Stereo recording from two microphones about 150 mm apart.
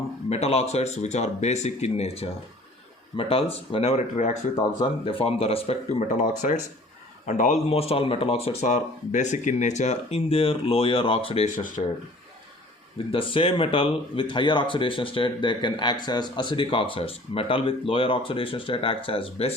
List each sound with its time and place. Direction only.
0.3 s speech: 45° left (ahead or behind)
5.0 s speech: 40° left (ahead or behind)
6.1 s speech: 55° left (ahead or behind)
7.7 s speech: 40° left (ahead or behind)
11.4 s speech: 60° left (ahead or behind)
13.1 s speech: 35° left (ahead or behind)